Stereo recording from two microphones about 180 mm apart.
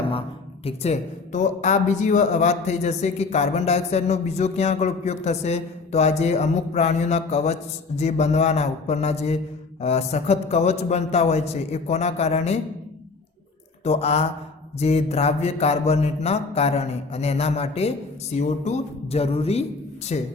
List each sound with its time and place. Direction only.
0.1 s speech: 30° left (ahead or behind)
13.8 s speech: 35° left (ahead or behind)